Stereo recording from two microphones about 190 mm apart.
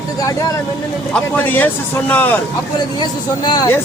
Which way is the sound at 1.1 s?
10° left (ahead or behind).